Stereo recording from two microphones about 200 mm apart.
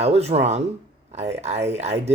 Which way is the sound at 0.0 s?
30° right (ahead or behind).